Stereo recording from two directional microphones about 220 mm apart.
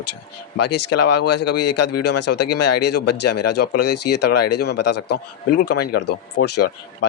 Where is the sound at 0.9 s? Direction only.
90° left.